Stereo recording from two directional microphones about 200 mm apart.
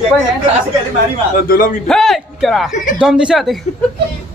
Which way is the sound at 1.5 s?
45° left (ahead or behind).